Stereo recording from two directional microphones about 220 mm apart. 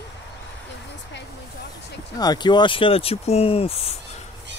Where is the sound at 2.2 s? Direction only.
20° left (ahead or behind).